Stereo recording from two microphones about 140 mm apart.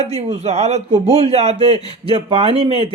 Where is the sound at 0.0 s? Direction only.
50° right (ahead or behind).